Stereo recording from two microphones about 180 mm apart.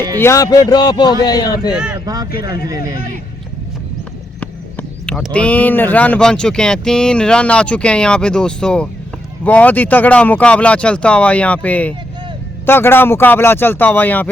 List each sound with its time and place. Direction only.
0.2 s speech: 15° left (ahead or behind)
1.7 s speech: 5° right (ahead or behind)
2.6 s speech: 20° right (ahead or behind)
4.4 s speech: 5° left (ahead or behind)